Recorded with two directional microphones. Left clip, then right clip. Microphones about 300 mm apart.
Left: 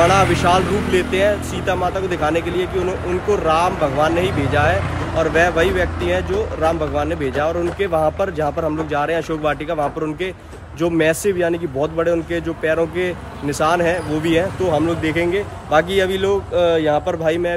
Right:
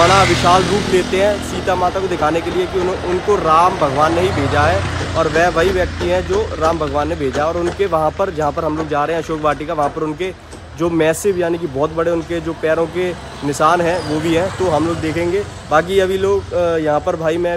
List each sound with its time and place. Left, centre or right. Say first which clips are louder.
0.0 s speech: right 3 dB; centre
2.5 s speech: right 3 dB; right
3.4 s speech: right 5 dB; centre
5.2 s speech: right 2 dB; centre